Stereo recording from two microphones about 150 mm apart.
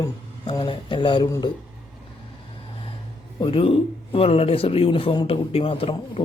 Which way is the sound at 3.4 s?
35° left (ahead or behind).